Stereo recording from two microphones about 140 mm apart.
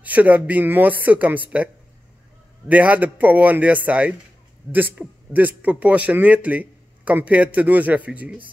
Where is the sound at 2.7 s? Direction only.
10° right (ahead or behind).